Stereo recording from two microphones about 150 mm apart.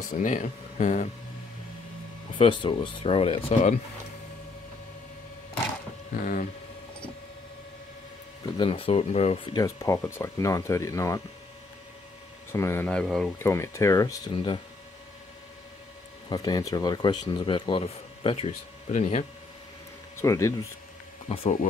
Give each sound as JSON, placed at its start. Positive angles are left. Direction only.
{"t": 0.1, "sound": "speech", "side_deg": 60}
{"t": 2.3, "sound": "speech", "side_deg": 35}
{"t": 8.5, "sound": "speech", "side_deg": 40}
{"t": 9.6, "sound": "speech", "side_deg": 20}
{"t": 12.5, "sound": "speech", "side_deg": 20}
{"t": 12.8, "sound": "speech", "side_deg": 5}
{"t": 13.4, "sound": "speech", "side_deg": 20}
{"t": 14.3, "sound": "speech", "side_deg": 35}
{"t": 16.3, "sound": "speech", "side_deg": 25}
{"t": 18.9, "sound": "speech", "side_deg": 50}
{"t": 20.2, "sound": "speech", "side_deg": 20}
{"t": 21.3, "sound": "speech", "side_deg": 40}